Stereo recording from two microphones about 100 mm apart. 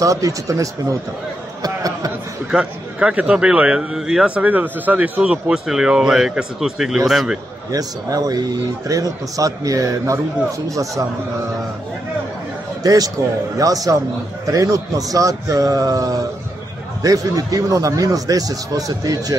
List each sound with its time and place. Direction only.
0.0 s a man's voice: 35° right (ahead or behind)
1.6 s a sound: 35° right (ahead or behind)
2.5 s a man's voice: 10° right (ahead or behind)
7.7 s a man's voice: 40° right (ahead or behind)
12.8 s a man's voice: 40° right (ahead or behind)